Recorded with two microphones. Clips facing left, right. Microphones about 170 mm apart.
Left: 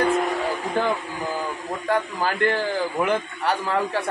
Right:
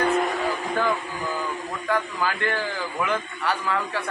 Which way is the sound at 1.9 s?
30° left (ahead or behind).